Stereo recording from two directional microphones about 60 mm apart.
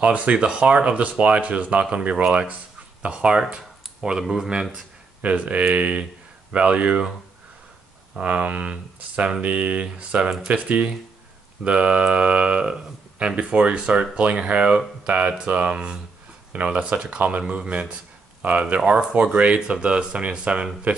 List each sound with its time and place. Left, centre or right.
0.0 s speech: right
5.2 s speech: right
8.2 s speech: right